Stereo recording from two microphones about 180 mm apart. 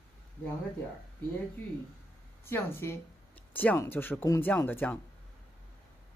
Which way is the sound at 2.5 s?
10° left (ahead or behind).